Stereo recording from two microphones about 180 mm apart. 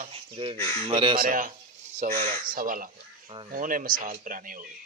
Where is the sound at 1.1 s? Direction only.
50° right (ahead or behind).